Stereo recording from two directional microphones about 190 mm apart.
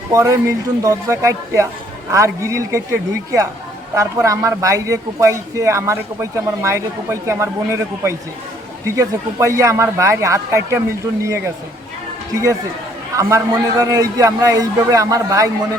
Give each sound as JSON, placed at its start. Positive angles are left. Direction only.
{"t": 0.1, "sound": "speech", "side_deg": -15}
{"t": 3.9, "sound": "speech", "side_deg": -15}
{"t": 13.1, "sound": "speech", "side_deg": -20}